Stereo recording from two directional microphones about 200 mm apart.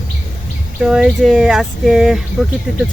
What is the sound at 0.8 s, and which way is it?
Speech, 5° right (ahead or behind).